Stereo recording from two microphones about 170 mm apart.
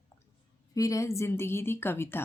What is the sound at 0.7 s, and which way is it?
Speech, 20° left (ahead or behind).